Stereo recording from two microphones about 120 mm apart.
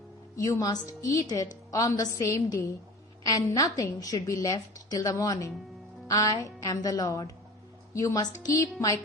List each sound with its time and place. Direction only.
0.3 s a woman's voice: 30° left (ahead or behind)